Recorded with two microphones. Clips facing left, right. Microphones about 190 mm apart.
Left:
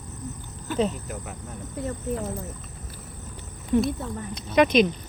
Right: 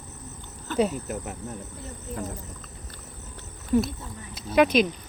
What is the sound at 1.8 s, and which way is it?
Speech, 60° left (ahead or behind).